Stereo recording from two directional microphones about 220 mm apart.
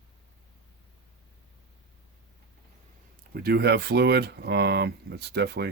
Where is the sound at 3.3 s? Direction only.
45° right (ahead or behind).